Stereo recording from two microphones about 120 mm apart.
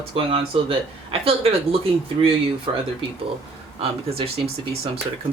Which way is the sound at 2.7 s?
40° right (ahead or behind).